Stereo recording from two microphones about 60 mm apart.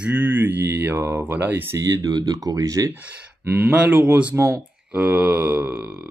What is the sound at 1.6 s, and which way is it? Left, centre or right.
Speech, right.